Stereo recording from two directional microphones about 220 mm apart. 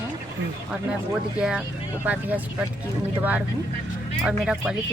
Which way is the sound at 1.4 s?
5° right (ahead or behind).